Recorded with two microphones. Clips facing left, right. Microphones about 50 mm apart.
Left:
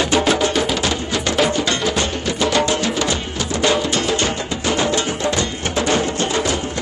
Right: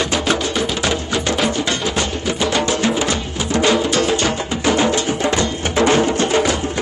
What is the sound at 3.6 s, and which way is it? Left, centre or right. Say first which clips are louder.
Music: right 2 dB; right.